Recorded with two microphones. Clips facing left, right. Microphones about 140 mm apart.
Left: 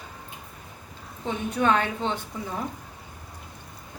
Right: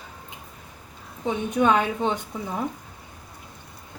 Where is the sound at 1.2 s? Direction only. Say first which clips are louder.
Right 3 dB; 15° right (ahead or behind).